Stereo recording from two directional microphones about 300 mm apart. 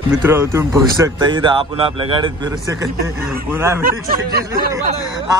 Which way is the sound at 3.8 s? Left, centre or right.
Right.